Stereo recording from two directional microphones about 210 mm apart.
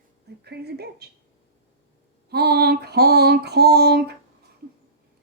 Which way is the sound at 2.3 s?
50° right (ahead or behind).